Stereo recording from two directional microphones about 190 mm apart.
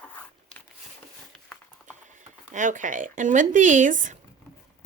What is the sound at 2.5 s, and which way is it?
Speech, 40° right (ahead or behind).